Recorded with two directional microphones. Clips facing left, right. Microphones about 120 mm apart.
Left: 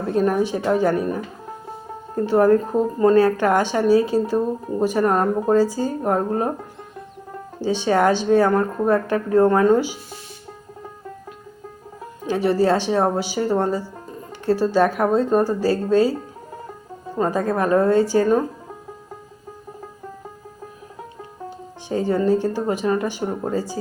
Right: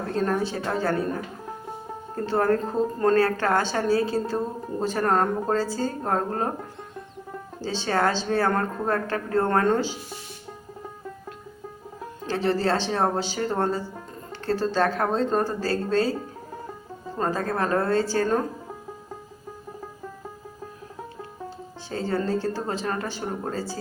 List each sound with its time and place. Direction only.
0.1 s speech: 15° left (ahead or behind)
7.6 s speech: 15° left (ahead or behind)
12.2 s speech: 15° left (ahead or behind)
17.2 s speech: 15° left (ahead or behind)
21.8 s speech: 15° left (ahead or behind)